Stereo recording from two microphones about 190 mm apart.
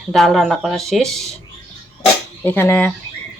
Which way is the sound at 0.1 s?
Centre (ahead or behind).